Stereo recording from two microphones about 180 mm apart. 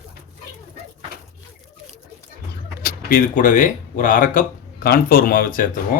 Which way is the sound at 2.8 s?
50° left (ahead or behind).